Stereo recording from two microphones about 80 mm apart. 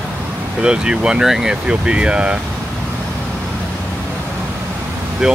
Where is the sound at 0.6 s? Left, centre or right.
Centre.